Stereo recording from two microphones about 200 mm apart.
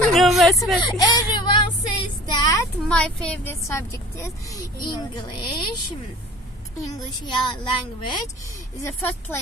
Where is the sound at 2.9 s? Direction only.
5° left (ahead or behind); by 5.5 s 20° left (ahead or behind).